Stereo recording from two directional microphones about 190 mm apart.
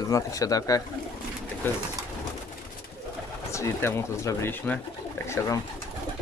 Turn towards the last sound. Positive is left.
turn(degrees=15)  # may be behind; listen again after turning